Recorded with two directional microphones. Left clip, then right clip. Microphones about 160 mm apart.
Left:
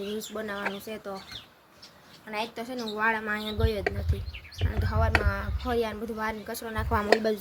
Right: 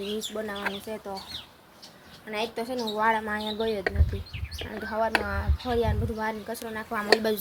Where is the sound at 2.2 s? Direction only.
10° left (ahead or behind).